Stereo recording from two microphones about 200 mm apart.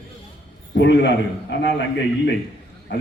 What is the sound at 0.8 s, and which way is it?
Speech, 60° left (ahead or behind).